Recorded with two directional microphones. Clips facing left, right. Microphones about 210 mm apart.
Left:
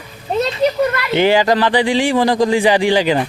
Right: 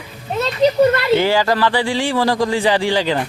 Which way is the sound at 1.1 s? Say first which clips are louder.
Left 2 dB; 20° left (ahead or behind).